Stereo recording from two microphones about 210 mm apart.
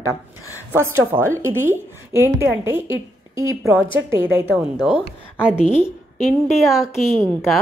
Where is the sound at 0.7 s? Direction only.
10° right (ahead or behind).